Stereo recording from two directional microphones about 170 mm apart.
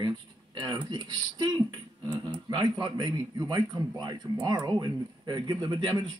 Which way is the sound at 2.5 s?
25° right (ahead or behind).